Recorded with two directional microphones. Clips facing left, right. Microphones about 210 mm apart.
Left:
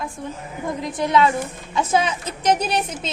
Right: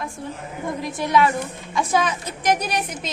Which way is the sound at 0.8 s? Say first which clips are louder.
Left 1 dB; 20° left (ahead or behind).